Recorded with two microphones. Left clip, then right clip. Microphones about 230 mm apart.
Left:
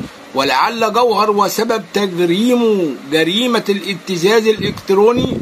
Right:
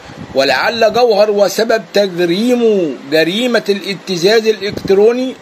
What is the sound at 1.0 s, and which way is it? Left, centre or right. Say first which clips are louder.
A man's voice: right 3 dB; centre.